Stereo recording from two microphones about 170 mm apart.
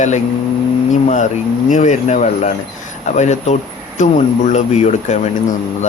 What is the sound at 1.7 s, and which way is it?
Speech, 45° left (ahead or behind).